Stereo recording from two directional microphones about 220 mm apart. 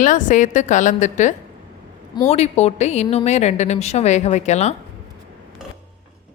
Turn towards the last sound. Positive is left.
turn(degrees=30)  # may be behind; listen again after turning